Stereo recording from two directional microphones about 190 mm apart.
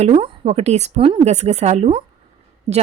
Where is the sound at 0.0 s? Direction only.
35° right (ahead or behind).